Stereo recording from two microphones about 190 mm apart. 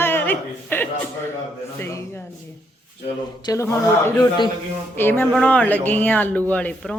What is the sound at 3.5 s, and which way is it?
Speech, 20° left (ahead or behind).